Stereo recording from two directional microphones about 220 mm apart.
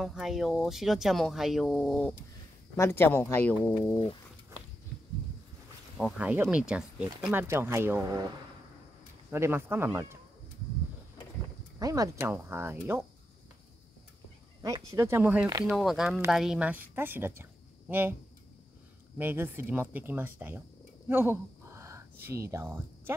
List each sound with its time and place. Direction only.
0.0 s speech: centre (ahead or behind)
3.9 s speech: 25° left (ahead or behind)
5.9 s speech: 5° right (ahead or behind)
9.3 s speech: 10° right (ahead or behind)
11.8 s speech: 15° right (ahead or behind)
14.9 s speech: 10° right (ahead or behind)
15.7 s a woman's voice: centre (ahead or behind)
19.1 s speech: 10° right (ahead or behind)
21.1 s a sound: 10° right (ahead or behind)
22.5 s speech: 10° right (ahead or behind)